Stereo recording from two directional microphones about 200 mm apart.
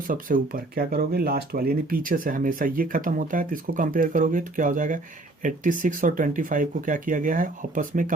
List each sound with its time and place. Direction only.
0.1 s speech: 45° right (ahead or behind)